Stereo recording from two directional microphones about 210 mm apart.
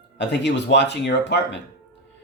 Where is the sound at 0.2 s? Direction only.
55° left (ahead or behind).